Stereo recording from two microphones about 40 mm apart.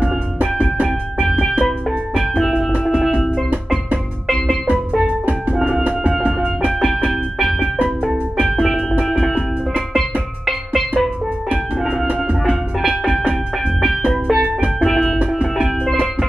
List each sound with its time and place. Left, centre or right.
0.4 s music: right
1.6 s music: centre
5.0 s music: right
7.1 s music: centre
8.5 s music: centre
12.8 s music: centre